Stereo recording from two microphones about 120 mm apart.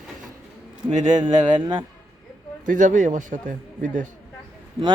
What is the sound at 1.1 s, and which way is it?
Speech, 35° right (ahead or behind).